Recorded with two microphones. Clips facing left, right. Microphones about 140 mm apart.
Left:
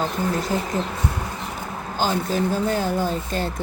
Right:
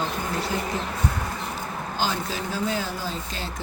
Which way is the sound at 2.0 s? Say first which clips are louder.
Left 6 dB; 45° left (ahead or behind).